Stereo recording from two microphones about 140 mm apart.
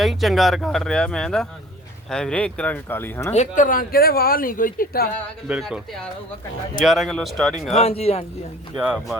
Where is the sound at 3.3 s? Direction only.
60° left (ahead or behind); by 5.1 s 90° left.